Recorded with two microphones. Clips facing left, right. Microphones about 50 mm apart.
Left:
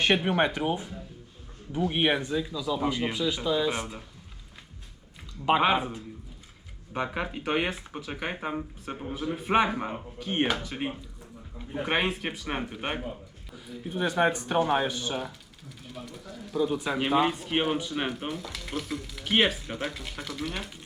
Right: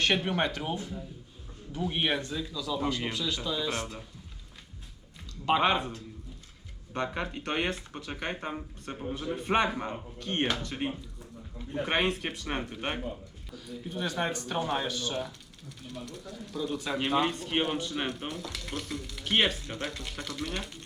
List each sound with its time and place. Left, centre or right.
0.0 s speech: centre
5.5 s speech: centre